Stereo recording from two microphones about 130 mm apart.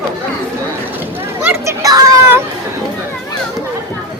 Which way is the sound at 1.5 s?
25° right (ahead or behind).